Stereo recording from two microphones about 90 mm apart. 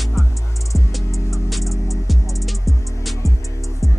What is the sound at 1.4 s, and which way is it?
Music, centre (ahead or behind).